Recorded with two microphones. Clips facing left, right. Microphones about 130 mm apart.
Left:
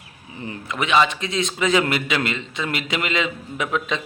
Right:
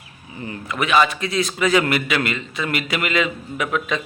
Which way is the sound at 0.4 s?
20° left (ahead or behind).